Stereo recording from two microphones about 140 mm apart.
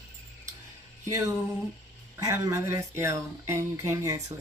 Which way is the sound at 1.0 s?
20° right (ahead or behind).